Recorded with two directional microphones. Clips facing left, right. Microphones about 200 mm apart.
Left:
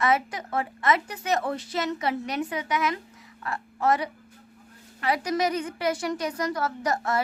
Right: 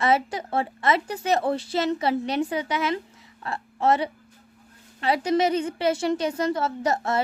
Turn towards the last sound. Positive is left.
turn(degrees=-25)  # may be behind; listen again after turning